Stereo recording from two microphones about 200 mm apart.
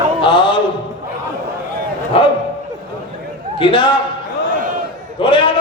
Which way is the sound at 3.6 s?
25° left (ahead or behind).